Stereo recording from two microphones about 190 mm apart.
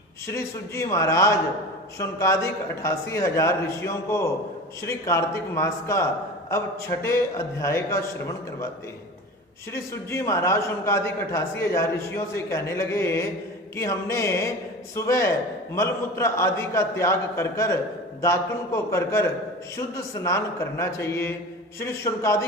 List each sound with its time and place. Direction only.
0.3 s a man's voice: 15° left (ahead or behind)
9.7 s a man's voice: 15° left (ahead or behind)